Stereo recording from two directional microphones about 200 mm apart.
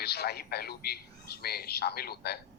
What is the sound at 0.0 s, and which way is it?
A man's voice, 55° left (ahead or behind).